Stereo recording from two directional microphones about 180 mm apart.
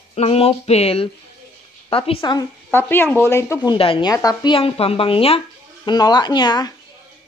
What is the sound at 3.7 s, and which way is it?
Speech, 30° left (ahead or behind).